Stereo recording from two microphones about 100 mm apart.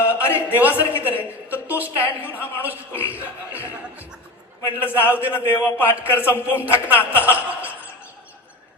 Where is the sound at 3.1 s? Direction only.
15° right (ahead or behind).